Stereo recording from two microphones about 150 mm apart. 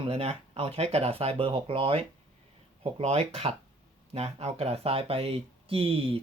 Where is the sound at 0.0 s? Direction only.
40° right (ahead or behind).